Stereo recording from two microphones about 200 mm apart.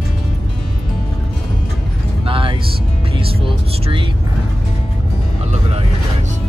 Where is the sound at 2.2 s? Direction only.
25° right (ahead or behind).